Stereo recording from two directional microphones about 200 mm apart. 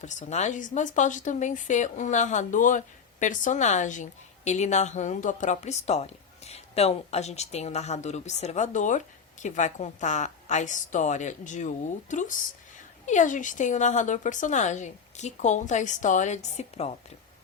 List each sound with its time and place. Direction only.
0.0 s speech: 35° left (ahead or behind)